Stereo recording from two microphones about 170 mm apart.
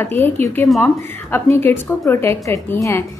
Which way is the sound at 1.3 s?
15° left (ahead or behind).